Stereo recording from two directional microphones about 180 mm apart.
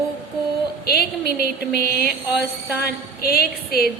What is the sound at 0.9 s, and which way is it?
A woman's voice, 55° left (ahead or behind).